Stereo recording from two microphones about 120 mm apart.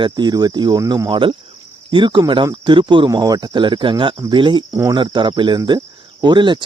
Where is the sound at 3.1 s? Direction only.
35° right (ahead or behind).